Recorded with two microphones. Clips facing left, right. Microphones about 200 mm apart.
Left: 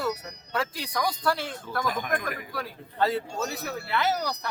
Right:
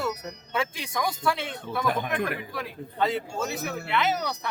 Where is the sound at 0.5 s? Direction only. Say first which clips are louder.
Even; centre (ahead or behind).